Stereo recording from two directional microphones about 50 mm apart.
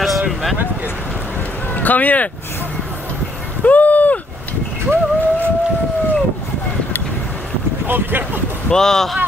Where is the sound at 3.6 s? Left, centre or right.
Left.